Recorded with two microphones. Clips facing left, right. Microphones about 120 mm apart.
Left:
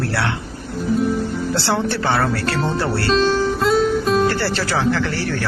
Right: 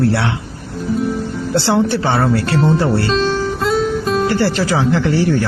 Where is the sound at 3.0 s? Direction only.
Centre (ahead or behind).